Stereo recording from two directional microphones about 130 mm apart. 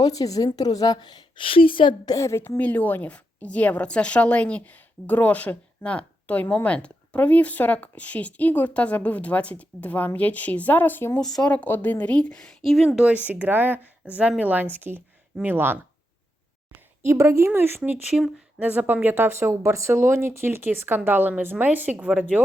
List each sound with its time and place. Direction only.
0.0 s a woman's voice: 30° left (ahead or behind)
2.1 s a woman's voice: 20° left (ahead or behind)
11.2 s a woman's voice: 5° left (ahead or behind); by 15.8 s 15° right (ahead or behind)
17.1 s a woman's voice: 20° right (ahead or behind)